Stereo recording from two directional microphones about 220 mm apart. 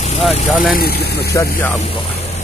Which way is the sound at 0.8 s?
45° left (ahead or behind).